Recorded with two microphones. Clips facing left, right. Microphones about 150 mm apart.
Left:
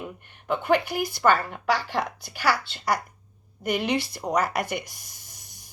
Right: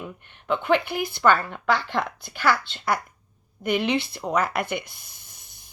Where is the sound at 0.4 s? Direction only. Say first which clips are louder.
Right 1 dB; 50° left (ahead or behind).